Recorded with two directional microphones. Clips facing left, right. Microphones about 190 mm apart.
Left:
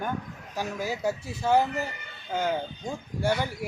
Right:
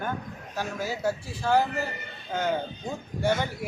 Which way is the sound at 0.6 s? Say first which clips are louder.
Even; 15° left (ahead or behind).